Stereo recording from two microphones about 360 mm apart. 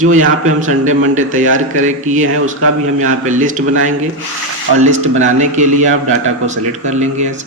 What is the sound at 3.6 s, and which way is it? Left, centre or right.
Speech, right.